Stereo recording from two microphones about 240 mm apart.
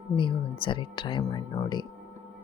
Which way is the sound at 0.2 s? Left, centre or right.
Left.